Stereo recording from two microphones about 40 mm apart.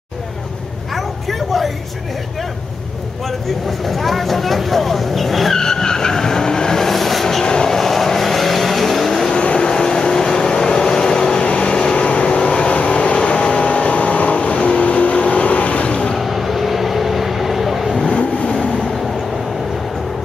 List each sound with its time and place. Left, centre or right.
3.8 s speech: centre
5.6 s vehicle: centre
7.4 s train: centre
7.7 s vehicle: centre
9.3 s vehicle: left
16.2 s vehicle: centre
18.0 s vehicle: left